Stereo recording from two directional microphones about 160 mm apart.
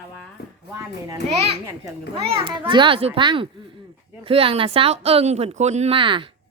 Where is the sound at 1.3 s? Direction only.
40° right (ahead or behind).